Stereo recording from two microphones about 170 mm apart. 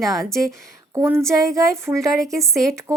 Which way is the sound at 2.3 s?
Centre (ahead or behind).